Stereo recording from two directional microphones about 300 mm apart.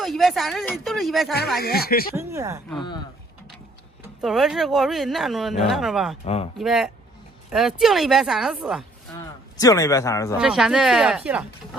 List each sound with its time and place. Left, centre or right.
0.0 s speech: centre
1.5 s speech: left
2.1 s speech: centre
4.2 s speech: centre
6.2 s speech: centre
6.6 s speech: centre
9.6 s speech: centre
10.3 s speech: centre